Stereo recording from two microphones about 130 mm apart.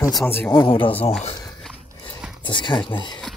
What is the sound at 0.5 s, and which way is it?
Speech, 40° left (ahead or behind).